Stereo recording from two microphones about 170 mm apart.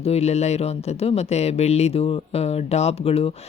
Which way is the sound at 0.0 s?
40° left (ahead or behind).